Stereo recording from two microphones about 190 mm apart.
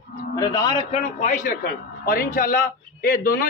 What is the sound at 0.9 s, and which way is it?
Speech, 40° left (ahead or behind).